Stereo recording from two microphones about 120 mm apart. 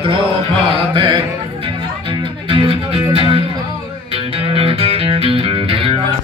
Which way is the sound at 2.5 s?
50° right (ahead or behind).